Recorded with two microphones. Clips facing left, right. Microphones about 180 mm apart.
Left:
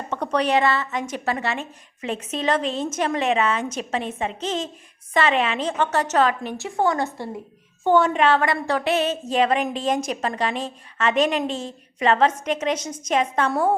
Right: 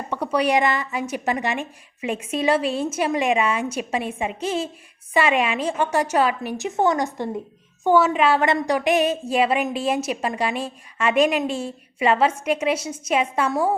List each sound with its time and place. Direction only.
0.1 s a woman's voice: 10° right (ahead or behind)
6.7 s a woman's voice: 20° right (ahead or behind)
7.9 s a woman's voice: 5° right (ahead or behind)
8.4 s a woman's voice: 15° right (ahead or behind)